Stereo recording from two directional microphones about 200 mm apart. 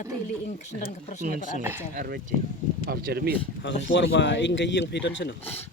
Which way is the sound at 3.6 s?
60° left (ahead or behind).